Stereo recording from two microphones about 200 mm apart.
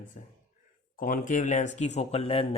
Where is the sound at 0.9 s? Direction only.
45° left (ahead or behind).